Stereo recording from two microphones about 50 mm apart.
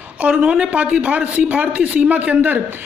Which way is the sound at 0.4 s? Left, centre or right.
Centre.